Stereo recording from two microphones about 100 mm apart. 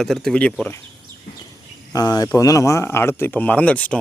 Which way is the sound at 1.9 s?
40° left (ahead or behind).